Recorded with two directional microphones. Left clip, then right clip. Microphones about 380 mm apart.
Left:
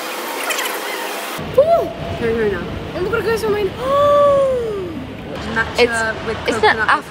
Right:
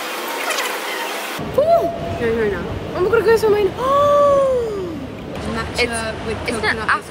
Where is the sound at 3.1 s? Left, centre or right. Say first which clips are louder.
Right 5 dB; centre.